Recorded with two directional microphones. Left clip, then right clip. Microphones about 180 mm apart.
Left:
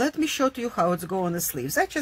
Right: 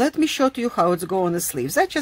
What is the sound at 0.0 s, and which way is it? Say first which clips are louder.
Speech: right 4 dB; 30° right (ahead or behind).